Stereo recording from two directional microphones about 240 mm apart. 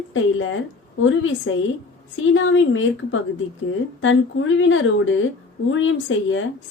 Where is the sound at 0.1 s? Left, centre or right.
Left.